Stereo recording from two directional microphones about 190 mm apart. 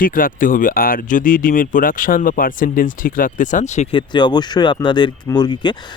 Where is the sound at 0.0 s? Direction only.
45° left (ahead or behind).